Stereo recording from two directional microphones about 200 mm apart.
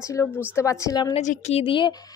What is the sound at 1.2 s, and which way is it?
Speech, 35° left (ahead or behind).